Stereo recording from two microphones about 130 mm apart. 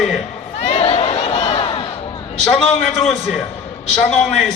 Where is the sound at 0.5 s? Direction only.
55° left (ahead or behind).